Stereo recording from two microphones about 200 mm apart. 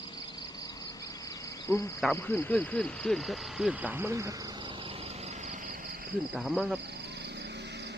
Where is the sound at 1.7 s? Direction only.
15° left (ahead or behind).